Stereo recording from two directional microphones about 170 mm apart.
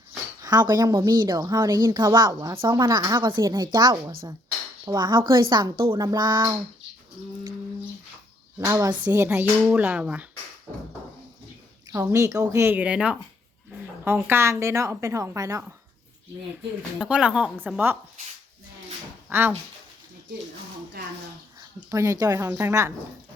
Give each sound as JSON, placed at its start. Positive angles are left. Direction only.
{"t": 0.4, "sound": "a woman's voice", "side_deg": -20}
{"t": 8.5, "sound": "a woman's voice", "side_deg": -20}
{"t": 9.0, "sound": "a woman's voice", "side_deg": -10}
{"t": 11.9, "sound": "a woman's voice", "side_deg": -20}
{"t": 17.0, "sound": "a woman's voice", "side_deg": -5}
{"t": 19.3, "sound": "speech", "side_deg": -10}
{"t": 21.0, "sound": "speech", "side_deg": -70}
{"t": 21.8, "sound": "a woman's voice", "side_deg": -20}